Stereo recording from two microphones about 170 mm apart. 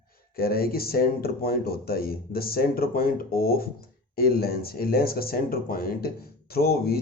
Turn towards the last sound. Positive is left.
turn(degrees=65)  # may be behind; listen again after turning